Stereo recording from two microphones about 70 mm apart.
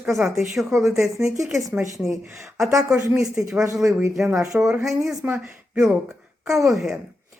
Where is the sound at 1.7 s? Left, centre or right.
Right.